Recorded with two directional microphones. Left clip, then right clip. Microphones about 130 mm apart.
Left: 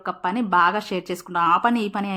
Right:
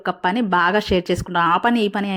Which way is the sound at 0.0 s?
35° right (ahead or behind).